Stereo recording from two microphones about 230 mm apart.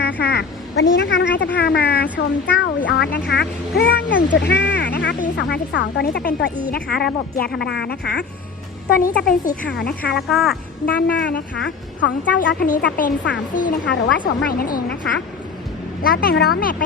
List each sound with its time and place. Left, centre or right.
0.0 s a woman's voice: left
10.2 s a woman's voice: centre
10.8 s speech: left
12.5 s speech: left